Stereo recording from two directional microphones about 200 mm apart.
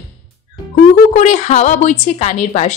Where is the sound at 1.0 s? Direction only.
35° left (ahead or behind).